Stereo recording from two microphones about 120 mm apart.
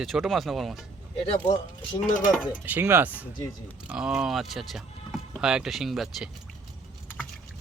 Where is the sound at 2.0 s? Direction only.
90° left.